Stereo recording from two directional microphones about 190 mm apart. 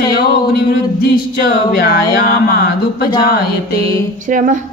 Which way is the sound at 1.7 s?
50° left (ahead or behind).